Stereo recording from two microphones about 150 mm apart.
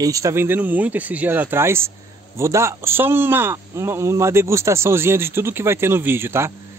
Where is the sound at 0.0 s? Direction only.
20° right (ahead or behind).